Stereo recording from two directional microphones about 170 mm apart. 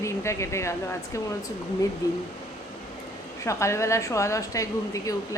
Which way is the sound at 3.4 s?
15° left (ahead or behind).